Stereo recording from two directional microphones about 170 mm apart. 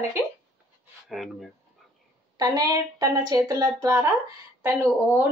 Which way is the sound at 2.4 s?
20° right (ahead or behind).